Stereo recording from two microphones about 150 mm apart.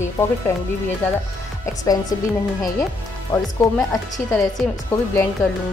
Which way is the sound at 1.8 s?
25° left (ahead or behind).